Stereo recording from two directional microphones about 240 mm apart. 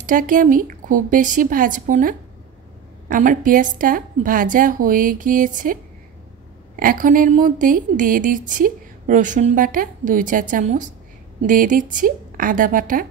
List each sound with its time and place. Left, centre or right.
0.0 s a woman's voice: right
6.8 s a woman's voice: right